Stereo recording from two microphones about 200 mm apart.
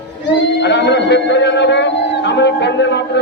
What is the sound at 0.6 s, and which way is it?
Speech, 60° left (ahead or behind).